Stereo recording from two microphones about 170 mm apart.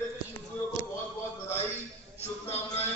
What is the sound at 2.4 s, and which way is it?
Music, 10° left (ahead or behind).